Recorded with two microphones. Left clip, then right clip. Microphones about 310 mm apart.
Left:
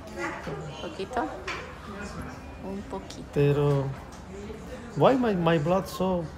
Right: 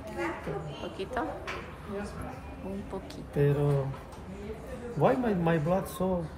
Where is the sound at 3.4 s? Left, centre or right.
Centre.